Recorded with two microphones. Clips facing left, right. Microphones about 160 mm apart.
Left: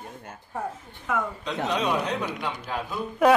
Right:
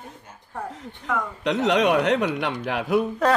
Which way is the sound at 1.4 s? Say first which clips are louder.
Right 12 dB; 80° right.